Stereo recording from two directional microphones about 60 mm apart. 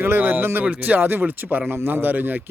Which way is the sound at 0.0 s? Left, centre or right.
Right.